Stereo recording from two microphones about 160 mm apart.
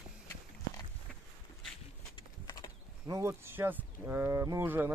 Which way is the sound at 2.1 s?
25° left (ahead or behind).